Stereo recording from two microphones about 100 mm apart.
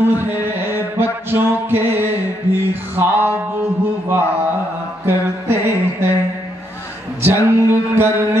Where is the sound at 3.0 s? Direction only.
20° right (ahead or behind).